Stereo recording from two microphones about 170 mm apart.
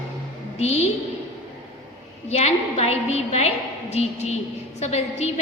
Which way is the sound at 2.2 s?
40° left (ahead or behind).